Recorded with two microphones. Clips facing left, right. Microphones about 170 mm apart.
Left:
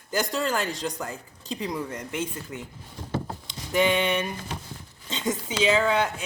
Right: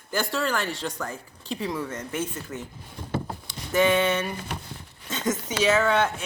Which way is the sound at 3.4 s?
15° left (ahead or behind).